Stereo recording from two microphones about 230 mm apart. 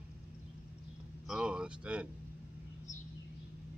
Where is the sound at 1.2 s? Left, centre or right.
Centre.